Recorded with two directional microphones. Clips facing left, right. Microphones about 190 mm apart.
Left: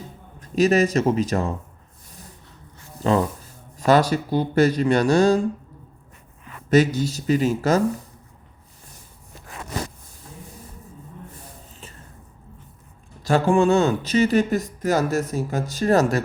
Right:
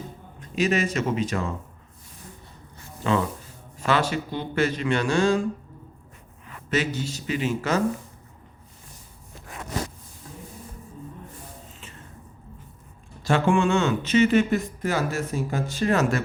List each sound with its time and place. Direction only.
0.3 s speech: 40° left (ahead or behind)
3.0 s speech: 35° left (ahead or behind)
6.7 s speech: 40° left (ahead or behind)
13.3 s speech: 35° left (ahead or behind)